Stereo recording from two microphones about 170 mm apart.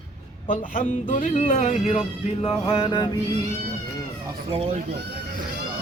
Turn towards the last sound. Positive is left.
turn(degrees=-35)  # may be behind; listen again after turning